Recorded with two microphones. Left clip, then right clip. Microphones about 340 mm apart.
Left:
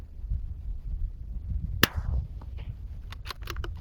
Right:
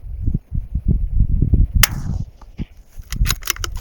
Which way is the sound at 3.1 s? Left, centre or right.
Centre.